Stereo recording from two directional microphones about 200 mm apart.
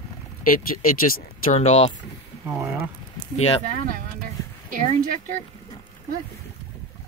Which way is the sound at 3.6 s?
40° right (ahead or behind).